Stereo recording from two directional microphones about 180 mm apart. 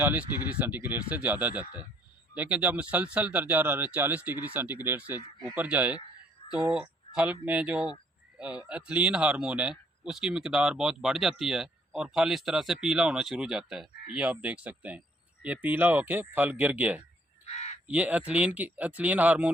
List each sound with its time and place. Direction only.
0.0 s speech: 10° right (ahead or behind)
17.4 s crow: 40° left (ahead or behind)
17.8 s speech: 10° right (ahead or behind)